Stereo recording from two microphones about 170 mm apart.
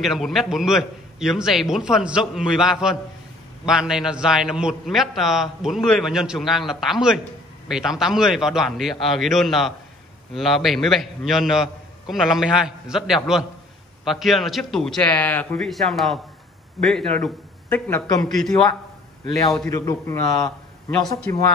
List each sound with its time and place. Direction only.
0.0 s a man's voice: centre (ahead or behind)
19.7 s a man's voice: 15° left (ahead or behind)